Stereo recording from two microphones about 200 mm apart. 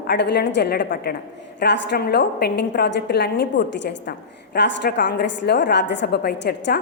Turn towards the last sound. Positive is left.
turn(degrees=55)  # may be behind; listen again after turning